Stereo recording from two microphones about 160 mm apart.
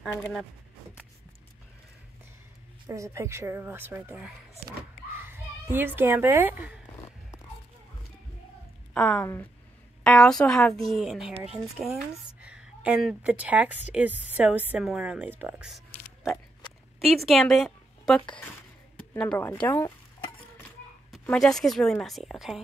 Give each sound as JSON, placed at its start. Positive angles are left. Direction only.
{"t": 2.9, "sound": "a child's voice", "side_deg": -20}
{"t": 8.9, "sound": "a woman's voice", "side_deg": 5}
{"t": 17.0, "sound": "a woman's voice", "side_deg": 0}
{"t": 21.1, "sound": "a woman's voice", "side_deg": 0}